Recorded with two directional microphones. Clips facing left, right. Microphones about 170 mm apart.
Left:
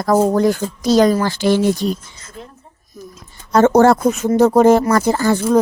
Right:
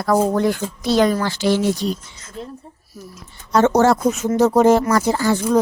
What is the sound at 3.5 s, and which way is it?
Speech, 50° left (ahead or behind).